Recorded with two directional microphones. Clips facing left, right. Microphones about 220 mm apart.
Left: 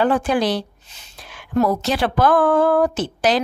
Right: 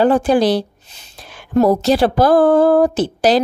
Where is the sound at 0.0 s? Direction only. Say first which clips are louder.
Right 5 dB; 35° right (ahead or behind).